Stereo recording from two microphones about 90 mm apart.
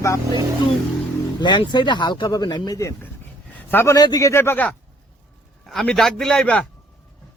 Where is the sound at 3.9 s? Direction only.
45° left (ahead or behind).